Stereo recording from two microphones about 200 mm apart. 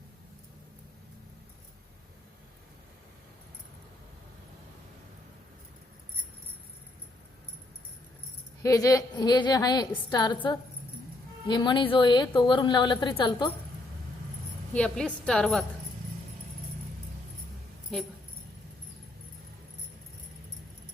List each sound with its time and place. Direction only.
8.6 s a woman's voice: 15° left (ahead or behind)
11.4 s a woman's voice: 20° left (ahead or behind)
14.7 s a woman's voice: 5° left (ahead or behind)